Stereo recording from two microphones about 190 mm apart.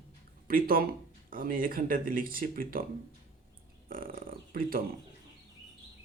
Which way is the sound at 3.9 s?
50° right (ahead or behind).